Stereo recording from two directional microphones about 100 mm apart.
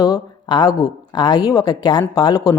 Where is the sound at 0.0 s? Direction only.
45° left (ahead or behind).